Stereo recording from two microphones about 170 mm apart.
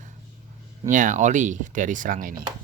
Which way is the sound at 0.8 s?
50° right (ahead or behind).